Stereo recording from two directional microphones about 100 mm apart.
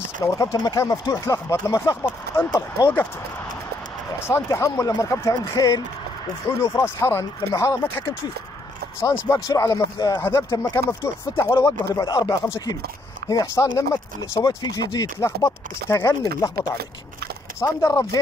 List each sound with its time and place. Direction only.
0.2 s speech: 30° left (ahead or behind)
2.6 s speech: 40° left (ahead or behind)
4.2 s speech: 30° left (ahead or behind)
10.1 s speech: 20° left (ahead or behind)
14.4 s speech: 40° left (ahead or behind)
15.1 s speech: 30° left (ahead or behind)